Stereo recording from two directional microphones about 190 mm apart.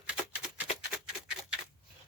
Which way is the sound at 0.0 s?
5° right (ahead or behind).